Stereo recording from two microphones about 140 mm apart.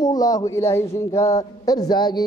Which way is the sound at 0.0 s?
25° left (ahead or behind).